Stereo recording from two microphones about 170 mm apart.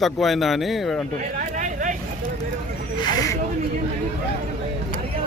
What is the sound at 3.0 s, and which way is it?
Snake, 20° left (ahead or behind).